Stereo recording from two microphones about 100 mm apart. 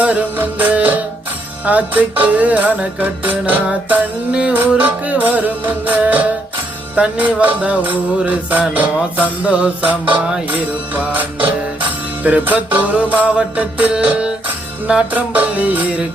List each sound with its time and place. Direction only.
0.0 s music: 15° right (ahead or behind)